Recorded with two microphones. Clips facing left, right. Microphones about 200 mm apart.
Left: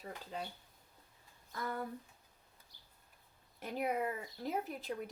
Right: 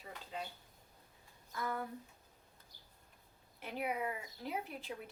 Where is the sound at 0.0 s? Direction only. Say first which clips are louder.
Left 2 dB; 40° left (ahead or behind).